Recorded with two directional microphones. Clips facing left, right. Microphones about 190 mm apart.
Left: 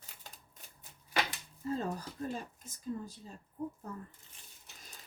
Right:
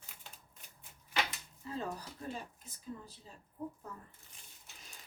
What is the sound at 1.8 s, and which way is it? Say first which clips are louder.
A woman's voice: left 4 dB; 45° left (ahead or behind).